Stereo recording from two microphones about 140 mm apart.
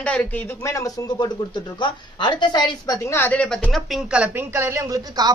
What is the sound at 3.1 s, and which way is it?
A woman's voice, 10° left (ahead or behind).